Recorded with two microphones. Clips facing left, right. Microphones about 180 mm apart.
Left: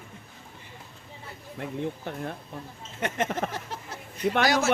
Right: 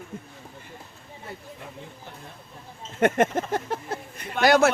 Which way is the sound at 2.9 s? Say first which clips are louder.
Right 7 dB; 50° right (ahead or behind).